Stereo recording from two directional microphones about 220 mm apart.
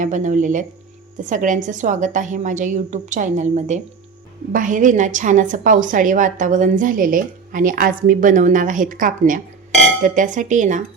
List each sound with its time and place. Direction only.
0.0 s a woman's voice: 35° right (ahead or behind)